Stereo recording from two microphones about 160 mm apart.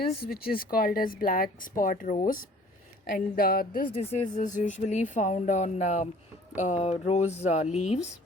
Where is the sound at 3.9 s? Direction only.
40° left (ahead or behind).